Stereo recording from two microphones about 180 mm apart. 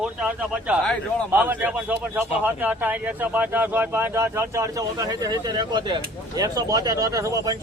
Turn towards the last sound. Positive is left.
turn(degrees=-20)  # may be behind; listen again after turning